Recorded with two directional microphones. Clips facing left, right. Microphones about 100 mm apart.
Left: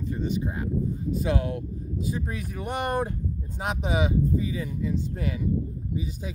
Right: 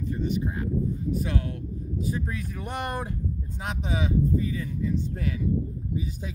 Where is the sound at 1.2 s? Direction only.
15° left (ahead or behind); by 3.1 s centre (ahead or behind).